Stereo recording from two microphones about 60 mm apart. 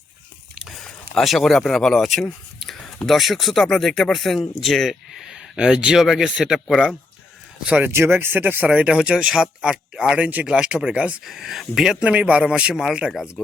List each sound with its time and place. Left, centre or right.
0.7 s speech: centre
2.6 s a sound: centre
3.1 s speech: centre
7.8 s speech: right
8.7 s speech: centre
11.3 s speech: centre
11.9 s speech: centre